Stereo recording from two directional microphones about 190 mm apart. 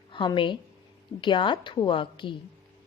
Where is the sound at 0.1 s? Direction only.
25° left (ahead or behind).